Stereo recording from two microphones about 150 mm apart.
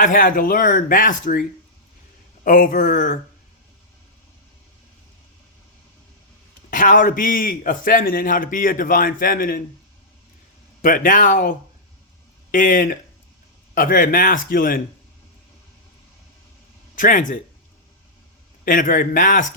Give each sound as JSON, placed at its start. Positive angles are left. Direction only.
{"t": 0.0, "sound": "speech", "side_deg": 65}
{"t": 6.7, "sound": "a man's voice", "side_deg": 60}
{"t": 10.8, "sound": "a man's voice", "side_deg": 60}
{"t": 16.9, "sound": "speech", "side_deg": 60}
{"t": 18.6, "sound": "speech", "side_deg": 60}